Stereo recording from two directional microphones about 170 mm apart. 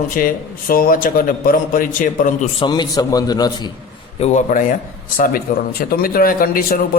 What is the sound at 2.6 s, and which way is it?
A man's voice, 25° left (ahead or behind).